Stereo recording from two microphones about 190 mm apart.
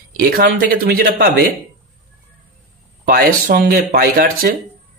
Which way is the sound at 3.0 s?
55° right (ahead or behind).